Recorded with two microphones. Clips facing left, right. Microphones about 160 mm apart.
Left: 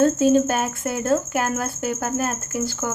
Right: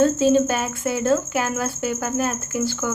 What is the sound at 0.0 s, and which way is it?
Speech, 45° left (ahead or behind).